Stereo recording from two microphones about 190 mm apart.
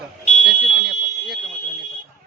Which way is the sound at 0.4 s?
Centre (ahead or behind).